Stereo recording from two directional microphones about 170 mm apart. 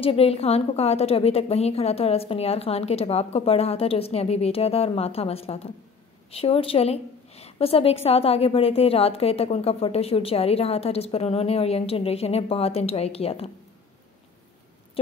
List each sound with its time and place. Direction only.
0.0 s a woman's voice: 35° left (ahead or behind)